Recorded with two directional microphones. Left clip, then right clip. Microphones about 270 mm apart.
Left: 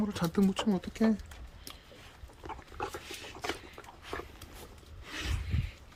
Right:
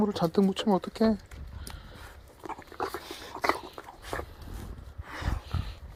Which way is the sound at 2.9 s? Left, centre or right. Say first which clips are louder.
Right 3 dB; centre.